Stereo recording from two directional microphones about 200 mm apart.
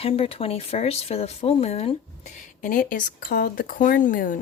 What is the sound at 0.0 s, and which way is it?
Speech, 30° left (ahead or behind).